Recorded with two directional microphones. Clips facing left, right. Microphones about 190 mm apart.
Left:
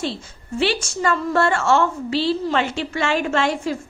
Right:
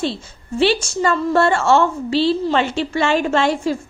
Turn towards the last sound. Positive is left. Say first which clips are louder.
# right 3 dB
turn(degrees=-30)  # may be behind; listen again after turning